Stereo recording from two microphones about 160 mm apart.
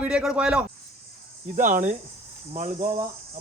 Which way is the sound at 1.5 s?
55° right (ahead or behind).